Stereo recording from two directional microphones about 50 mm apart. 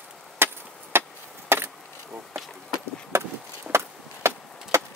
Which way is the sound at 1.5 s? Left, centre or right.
Right.